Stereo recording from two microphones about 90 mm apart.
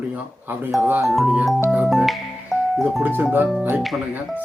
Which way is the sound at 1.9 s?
Centre (ahead or behind).